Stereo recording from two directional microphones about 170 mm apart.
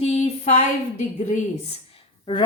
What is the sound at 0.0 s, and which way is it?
A woman's voice, 40° left (ahead or behind).